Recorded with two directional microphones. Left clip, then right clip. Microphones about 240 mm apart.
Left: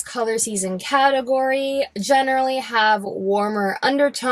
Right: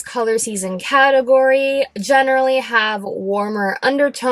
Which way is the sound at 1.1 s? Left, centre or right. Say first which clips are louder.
Right 7 dB; left.